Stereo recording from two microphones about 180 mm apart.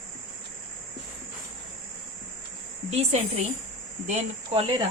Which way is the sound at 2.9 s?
35° right (ahead or behind).